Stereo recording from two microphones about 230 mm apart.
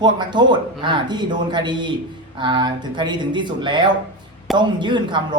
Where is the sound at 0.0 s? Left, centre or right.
Centre.